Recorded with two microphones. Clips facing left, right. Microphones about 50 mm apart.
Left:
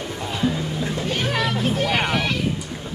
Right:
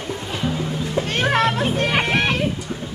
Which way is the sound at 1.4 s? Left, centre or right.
Right.